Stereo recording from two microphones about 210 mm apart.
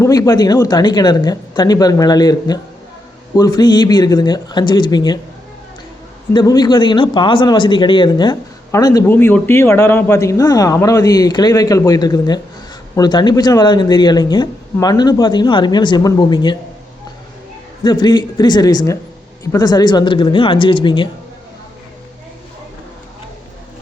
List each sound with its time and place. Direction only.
0.0 s speech: 15° left (ahead or behind)
6.3 s speech: 20° left (ahead or behind)
17.8 s speech: 20° left (ahead or behind)